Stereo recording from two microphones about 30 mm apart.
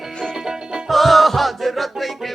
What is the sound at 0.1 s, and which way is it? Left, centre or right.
Music, left.